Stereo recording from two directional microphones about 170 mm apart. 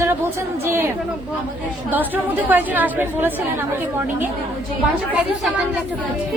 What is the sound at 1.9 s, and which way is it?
A woman's voice, 10° right (ahead or behind).